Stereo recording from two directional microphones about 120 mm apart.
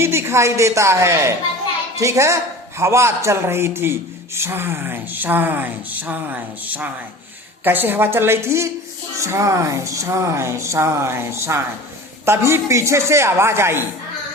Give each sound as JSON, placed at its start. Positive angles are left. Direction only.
{"t": 0.0, "sound": "a woman's voice", "side_deg": -20}